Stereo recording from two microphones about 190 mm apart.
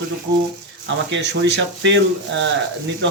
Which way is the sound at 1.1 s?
65° right (ahead or behind).